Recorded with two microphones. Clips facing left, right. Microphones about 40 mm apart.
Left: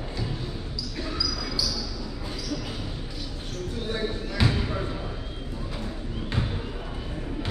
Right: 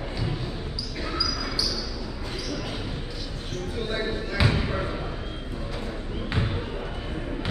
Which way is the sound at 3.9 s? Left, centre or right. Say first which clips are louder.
Right 1 dB; centre.